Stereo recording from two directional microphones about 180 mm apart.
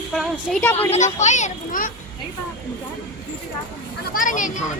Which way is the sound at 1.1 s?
40° left (ahead or behind).